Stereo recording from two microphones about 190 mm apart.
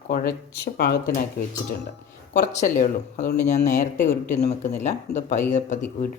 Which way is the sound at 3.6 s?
40° left (ahead or behind).